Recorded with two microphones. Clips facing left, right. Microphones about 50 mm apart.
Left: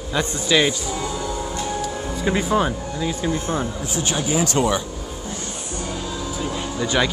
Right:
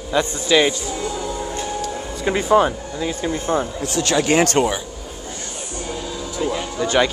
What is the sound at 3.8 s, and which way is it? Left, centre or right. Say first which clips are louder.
Speech: right 5 dB; right.